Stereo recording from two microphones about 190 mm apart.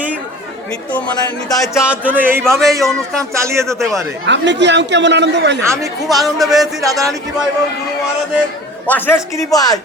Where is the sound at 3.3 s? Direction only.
15° right (ahead or behind).